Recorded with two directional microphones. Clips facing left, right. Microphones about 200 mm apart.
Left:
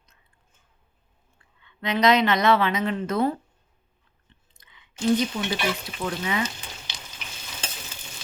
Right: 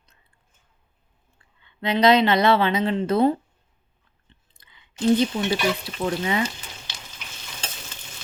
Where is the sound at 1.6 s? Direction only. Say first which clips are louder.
Right 3 dB; 30° right (ahead or behind).